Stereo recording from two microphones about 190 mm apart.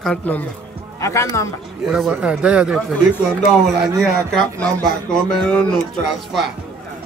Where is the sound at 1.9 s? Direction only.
Centre (ahead or behind).